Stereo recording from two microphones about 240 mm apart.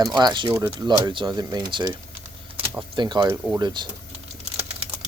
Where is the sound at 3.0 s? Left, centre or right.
Centre.